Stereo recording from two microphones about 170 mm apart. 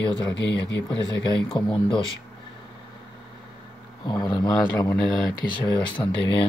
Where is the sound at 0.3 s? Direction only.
90° left.